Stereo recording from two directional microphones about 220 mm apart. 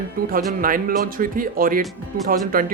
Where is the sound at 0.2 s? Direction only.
40° right (ahead or behind).